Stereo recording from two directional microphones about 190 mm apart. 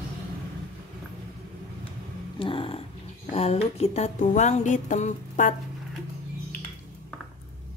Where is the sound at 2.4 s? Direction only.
25° left (ahead or behind).